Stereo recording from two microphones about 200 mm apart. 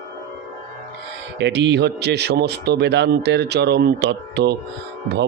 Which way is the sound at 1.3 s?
60° right (ahead or behind).